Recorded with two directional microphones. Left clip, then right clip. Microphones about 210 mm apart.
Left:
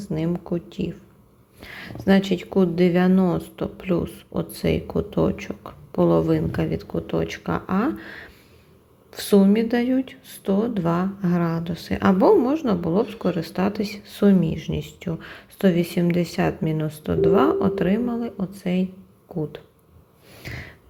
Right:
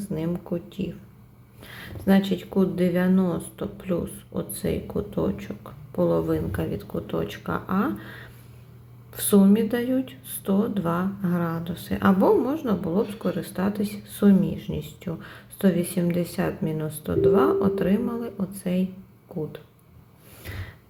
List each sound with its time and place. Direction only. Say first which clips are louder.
0.1 s speech: left 4 dB; 25° left (ahead or behind)
20.4 s snort: left 4 dB; 25° left (ahead or behind)